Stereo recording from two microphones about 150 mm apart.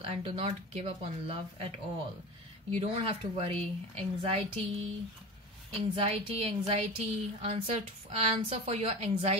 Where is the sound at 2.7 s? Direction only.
40° right (ahead or behind).